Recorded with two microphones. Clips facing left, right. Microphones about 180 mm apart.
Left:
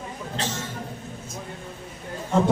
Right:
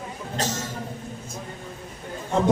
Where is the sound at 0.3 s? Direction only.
40° right (ahead or behind).